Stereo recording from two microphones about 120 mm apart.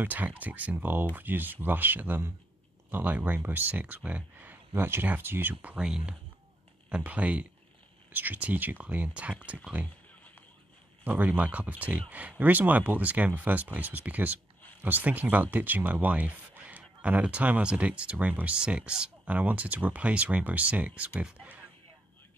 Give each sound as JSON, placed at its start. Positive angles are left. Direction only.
{"t": 0.0, "sound": "speech", "side_deg": -15}
{"t": 11.1, "sound": "speech", "side_deg": -15}